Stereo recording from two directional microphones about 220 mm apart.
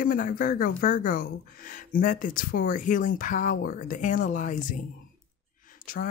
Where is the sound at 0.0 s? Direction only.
40° left (ahead or behind).